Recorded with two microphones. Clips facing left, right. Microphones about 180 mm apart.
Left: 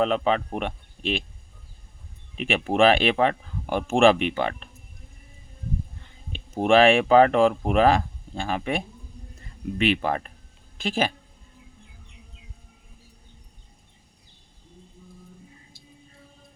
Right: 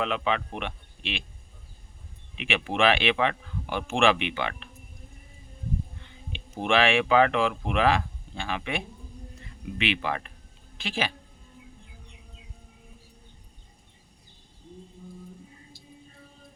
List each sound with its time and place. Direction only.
0.0 s speech: 40° left (ahead or behind)
2.4 s speech: 40° left (ahead or behind)
6.3 s a woman's voice: 45° left (ahead or behind)